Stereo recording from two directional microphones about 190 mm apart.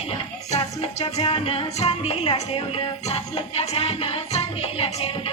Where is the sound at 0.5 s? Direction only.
35° left (ahead or behind).